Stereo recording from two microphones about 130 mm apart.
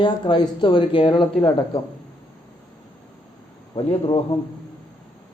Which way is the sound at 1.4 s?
35° left (ahead or behind).